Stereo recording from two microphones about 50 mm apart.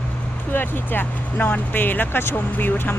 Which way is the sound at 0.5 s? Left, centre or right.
Left.